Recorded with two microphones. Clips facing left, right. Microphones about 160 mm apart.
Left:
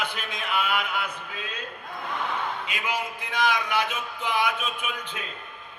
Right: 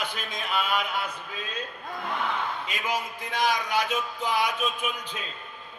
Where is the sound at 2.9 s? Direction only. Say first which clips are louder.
Right 1 dB; 40° right (ahead or behind).